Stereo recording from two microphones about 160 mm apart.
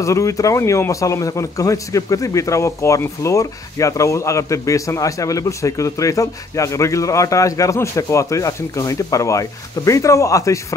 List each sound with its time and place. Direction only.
0.0 s a man's voice: 20° left (ahead or behind)